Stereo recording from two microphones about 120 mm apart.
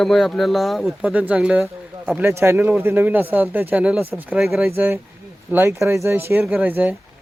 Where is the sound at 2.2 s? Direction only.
20° right (ahead or behind); by 4.6 s centre (ahead or behind).